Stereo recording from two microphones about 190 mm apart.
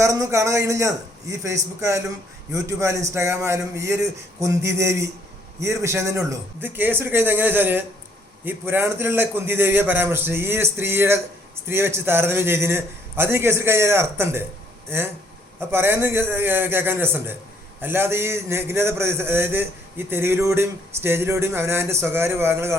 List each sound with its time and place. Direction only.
0.0 s a man's voice: 15° right (ahead or behind)